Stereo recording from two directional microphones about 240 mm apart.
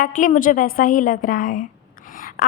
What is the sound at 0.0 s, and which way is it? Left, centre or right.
A woman's voice, left.